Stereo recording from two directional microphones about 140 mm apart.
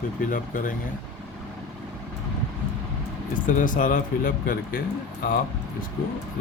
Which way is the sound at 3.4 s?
70° left (ahead or behind).